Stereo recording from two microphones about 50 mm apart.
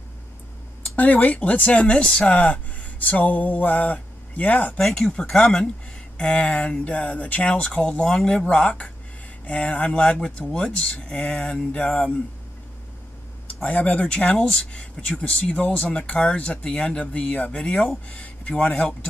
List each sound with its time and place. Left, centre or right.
0.9 s speech: left
4.9 s speech: centre
6.1 s speech: left
8.1 s speech: centre
8.5 s speech: left
9.8 s speech: centre
13.5 s speech: left
14.0 s speech: left